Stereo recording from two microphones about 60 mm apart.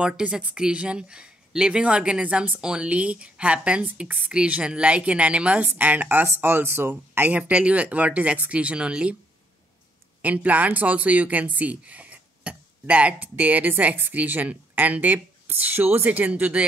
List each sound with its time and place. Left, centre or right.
0.0 s speech: centre
5.7 s speech: right
6.2 s speech: right
6.9 s speech: right
10.2 s speech: right